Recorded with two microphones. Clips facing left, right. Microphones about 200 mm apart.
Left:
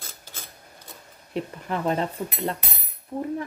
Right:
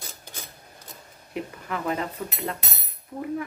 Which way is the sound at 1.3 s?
30° left (ahead or behind).